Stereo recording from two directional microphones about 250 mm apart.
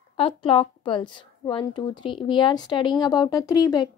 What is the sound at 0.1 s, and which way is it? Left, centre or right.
A woman's voice, left.